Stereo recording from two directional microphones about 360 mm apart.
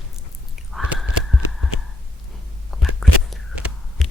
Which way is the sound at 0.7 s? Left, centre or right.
Centre.